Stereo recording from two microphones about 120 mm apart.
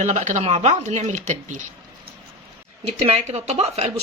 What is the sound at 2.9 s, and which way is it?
Speech, 60° right (ahead or behind).